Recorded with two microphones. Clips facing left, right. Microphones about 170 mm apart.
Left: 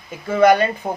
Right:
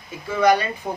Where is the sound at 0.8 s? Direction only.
55° left (ahead or behind).